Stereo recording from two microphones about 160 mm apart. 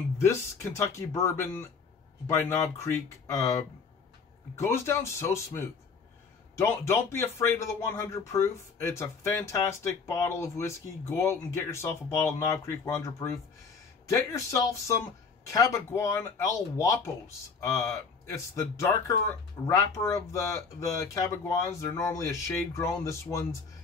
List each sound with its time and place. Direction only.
0.2 s speech: 15° left (ahead or behind)